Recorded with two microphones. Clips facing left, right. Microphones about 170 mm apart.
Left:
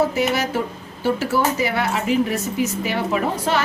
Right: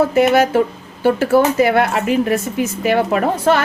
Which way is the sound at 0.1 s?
55° right (ahead or behind).